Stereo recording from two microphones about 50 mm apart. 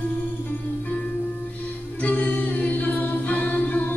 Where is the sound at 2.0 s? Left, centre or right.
Left.